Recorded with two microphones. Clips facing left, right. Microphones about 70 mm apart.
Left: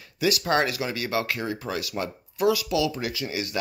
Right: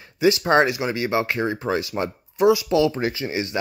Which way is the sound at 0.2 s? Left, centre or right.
Right.